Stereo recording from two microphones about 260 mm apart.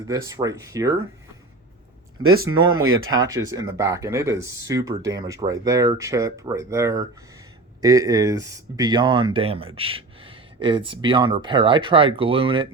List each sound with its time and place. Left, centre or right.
0.1 s speech: centre
2.2 s speech: right
3.2 s speech: centre